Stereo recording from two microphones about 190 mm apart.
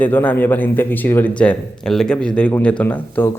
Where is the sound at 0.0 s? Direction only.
10° left (ahead or behind).